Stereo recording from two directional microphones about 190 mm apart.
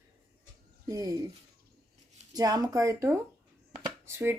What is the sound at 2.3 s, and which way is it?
Speech, 20° right (ahead or behind).